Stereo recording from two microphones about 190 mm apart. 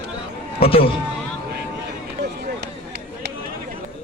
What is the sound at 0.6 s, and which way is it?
Speech, 30° left (ahead or behind).